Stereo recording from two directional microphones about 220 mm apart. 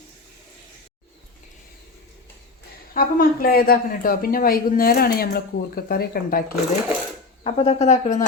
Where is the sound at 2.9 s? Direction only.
40° left (ahead or behind).